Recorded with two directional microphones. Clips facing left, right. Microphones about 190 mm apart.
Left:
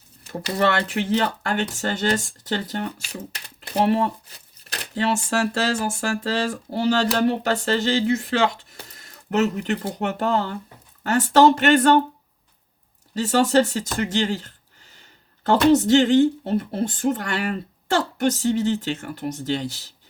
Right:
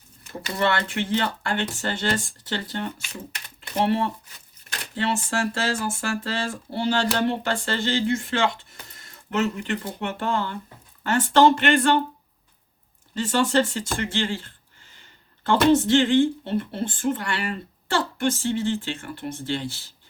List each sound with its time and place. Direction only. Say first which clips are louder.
0.3 s speech: left 3 dB; 35° left (ahead or behind)
8.9 s a sound: left 4 dB; 40° left (ahead or behind)
10.0 s speech: left 4 dB; 40° left (ahead or behind)
13.1 s speech: left 3 dB; 40° left (ahead or behind)